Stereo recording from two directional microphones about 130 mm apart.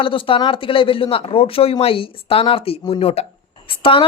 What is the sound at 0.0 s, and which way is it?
A woman's voice, 40° left (ahead or behind).